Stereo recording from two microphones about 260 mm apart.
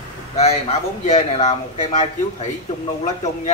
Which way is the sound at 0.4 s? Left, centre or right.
Left.